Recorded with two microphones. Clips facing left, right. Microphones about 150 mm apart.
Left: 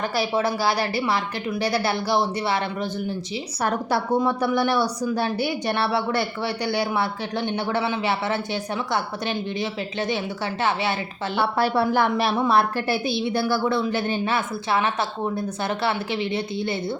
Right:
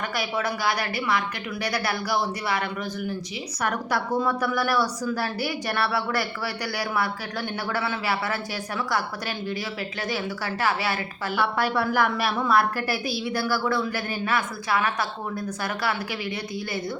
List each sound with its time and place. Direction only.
0.2 s a woman's voice: 30° left (ahead or behind)